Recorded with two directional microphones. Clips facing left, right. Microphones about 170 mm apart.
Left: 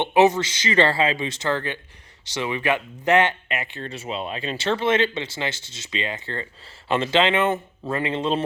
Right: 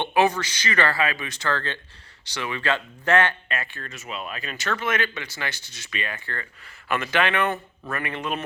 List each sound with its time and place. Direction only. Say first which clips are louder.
0.0 s speech: left 4 dB; 20° left (ahead or behind)